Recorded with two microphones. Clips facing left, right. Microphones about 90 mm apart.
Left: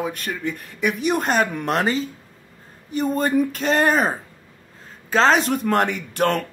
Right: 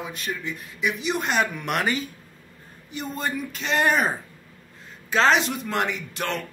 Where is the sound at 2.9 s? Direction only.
45° left (ahead or behind).